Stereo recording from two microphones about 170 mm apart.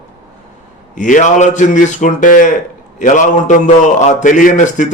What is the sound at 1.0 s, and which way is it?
A man's voice, 50° left (ahead or behind).